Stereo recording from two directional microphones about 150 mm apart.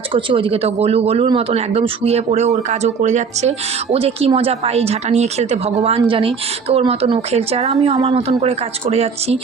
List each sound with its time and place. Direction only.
0.1 s speech: 35° right (ahead or behind)
3.9 s a woman's voice: 40° right (ahead or behind)